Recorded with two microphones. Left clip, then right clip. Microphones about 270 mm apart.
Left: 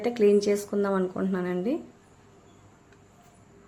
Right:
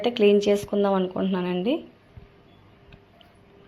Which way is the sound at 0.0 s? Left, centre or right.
Centre.